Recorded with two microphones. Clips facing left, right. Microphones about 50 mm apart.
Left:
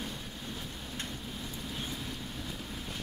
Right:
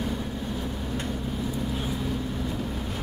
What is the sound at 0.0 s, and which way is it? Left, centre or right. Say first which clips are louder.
Vehicle: right 10 dB; centre.